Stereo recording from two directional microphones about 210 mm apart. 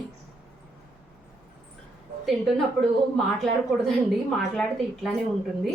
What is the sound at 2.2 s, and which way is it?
A woman's voice, centre (ahead or behind).